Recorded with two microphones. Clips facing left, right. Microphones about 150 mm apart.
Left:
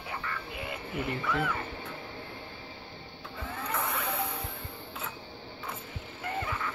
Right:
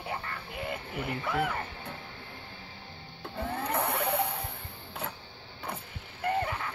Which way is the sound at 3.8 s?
60° right (ahead or behind).